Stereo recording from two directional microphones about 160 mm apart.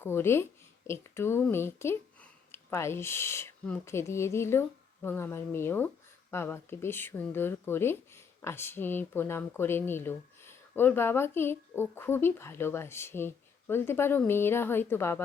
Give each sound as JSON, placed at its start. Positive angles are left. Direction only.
{"t": 0.0, "sound": "speech", "side_deg": 15}